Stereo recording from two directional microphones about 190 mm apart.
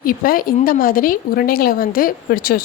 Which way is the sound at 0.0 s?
50° left (ahead or behind).